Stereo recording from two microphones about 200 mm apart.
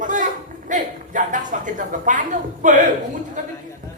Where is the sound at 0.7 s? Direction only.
40° right (ahead or behind).